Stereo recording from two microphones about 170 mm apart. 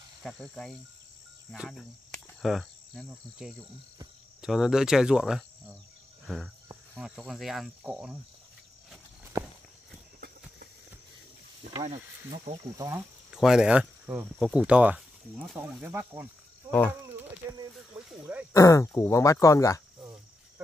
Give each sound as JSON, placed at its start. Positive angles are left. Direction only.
{"t": 0.2, "sound": "speech", "side_deg": 0}
{"t": 1.5, "sound": "cricket", "side_deg": 0}
{"t": 3.1, "sound": "speech", "side_deg": -5}
{"t": 6.2, "sound": "cricket", "side_deg": 0}
{"t": 7.0, "sound": "speech", "side_deg": -5}
{"t": 11.8, "sound": "speech", "side_deg": -40}
{"t": 12.7, "sound": "speech", "side_deg": -15}
{"t": 13.3, "sound": "speech", "side_deg": -5}
{"t": 17.1, "sound": "a sound", "side_deg": -15}
{"t": 17.9, "sound": "cricket", "side_deg": -10}
{"t": 18.5, "sound": "speech", "side_deg": 20}